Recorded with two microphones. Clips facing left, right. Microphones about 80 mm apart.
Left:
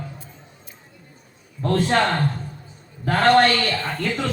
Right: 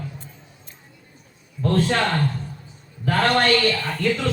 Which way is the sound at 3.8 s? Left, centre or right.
Left.